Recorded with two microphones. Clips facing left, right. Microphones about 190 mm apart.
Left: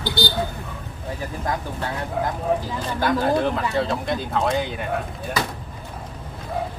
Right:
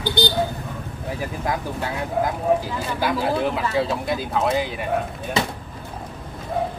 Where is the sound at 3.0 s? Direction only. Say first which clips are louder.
Left 2 dB; 5° right (ahead or behind).